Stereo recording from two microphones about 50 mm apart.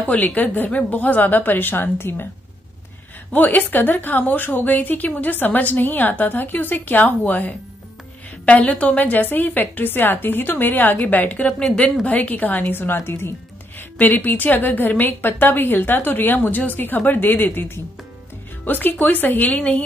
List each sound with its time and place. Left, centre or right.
0.0 s a woman's voice: left
3.3 s a woman's voice: left
13.7 s a woman's voice: left